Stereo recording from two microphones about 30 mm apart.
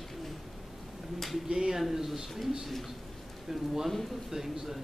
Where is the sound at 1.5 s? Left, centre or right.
Right.